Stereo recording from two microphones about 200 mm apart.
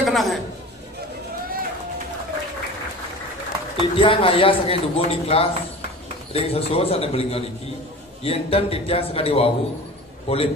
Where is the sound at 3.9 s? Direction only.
25° left (ahead or behind).